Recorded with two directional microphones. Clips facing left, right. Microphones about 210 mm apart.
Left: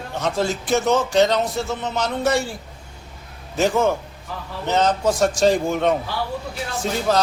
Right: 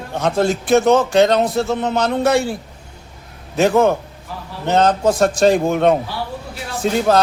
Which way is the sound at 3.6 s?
60° right (ahead or behind).